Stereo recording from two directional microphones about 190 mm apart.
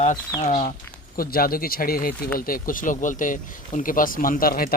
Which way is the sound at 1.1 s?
50° left (ahead or behind).